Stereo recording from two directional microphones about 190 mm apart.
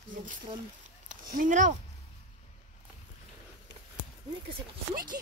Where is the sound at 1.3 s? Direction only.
45° right (ahead or behind).